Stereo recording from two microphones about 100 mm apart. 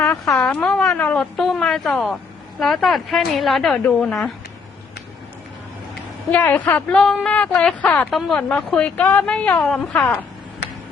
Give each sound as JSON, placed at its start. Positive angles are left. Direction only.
{"t": 0.3, "sound": "a woman's voice", "side_deg": 10}
{"t": 6.3, "sound": "a woman's voice", "side_deg": 15}